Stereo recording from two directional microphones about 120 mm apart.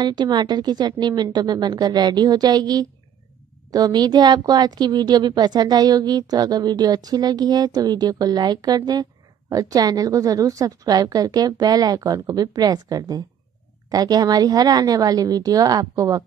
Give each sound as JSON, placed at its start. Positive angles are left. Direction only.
{"t": 0.0, "sound": "a woman's voice", "side_deg": -40}